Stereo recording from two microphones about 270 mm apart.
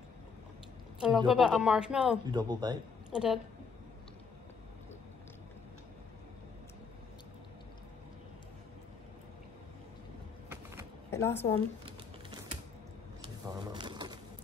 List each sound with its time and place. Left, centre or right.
0.9 s a woman's voice: centre
2.3 s speech: centre
3.1 s a woman's voice: centre
10.5 s a sound: centre
11.1 s a woman's voice: centre
13.6 s a sound: centre